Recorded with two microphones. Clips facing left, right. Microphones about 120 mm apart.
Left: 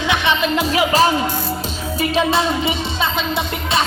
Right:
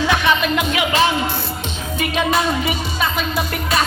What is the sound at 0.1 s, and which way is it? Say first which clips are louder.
Music: left 3 dB; 25° left (ahead or behind).